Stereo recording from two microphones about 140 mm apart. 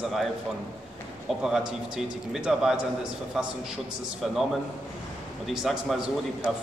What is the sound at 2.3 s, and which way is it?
Speech, 5° right (ahead or behind).